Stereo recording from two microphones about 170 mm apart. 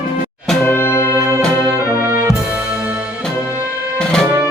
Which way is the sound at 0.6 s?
15° left (ahead or behind).